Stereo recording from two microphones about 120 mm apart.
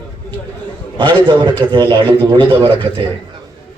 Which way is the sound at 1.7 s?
35° right (ahead or behind).